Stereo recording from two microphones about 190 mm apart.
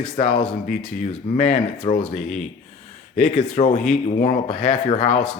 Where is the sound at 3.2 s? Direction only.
35° left (ahead or behind).